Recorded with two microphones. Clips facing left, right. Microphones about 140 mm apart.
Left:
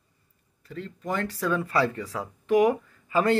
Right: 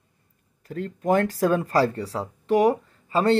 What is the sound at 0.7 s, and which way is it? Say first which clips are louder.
Speech: right 9 dB; 45° right (ahead or behind).